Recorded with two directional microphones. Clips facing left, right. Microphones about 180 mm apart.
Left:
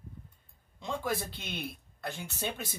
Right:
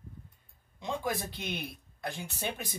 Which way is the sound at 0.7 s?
15° right (ahead or behind).